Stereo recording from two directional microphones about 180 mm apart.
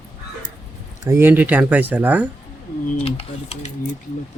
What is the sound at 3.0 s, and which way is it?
Speech, 30° left (ahead or behind).